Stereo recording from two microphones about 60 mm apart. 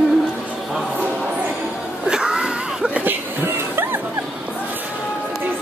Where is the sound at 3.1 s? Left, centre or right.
Right.